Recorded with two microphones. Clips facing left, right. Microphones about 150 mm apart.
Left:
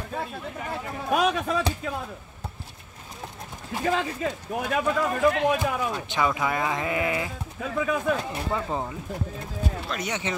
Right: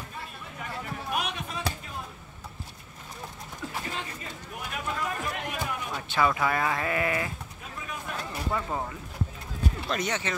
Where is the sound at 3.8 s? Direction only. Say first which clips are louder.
Left 17 dB; 90° left.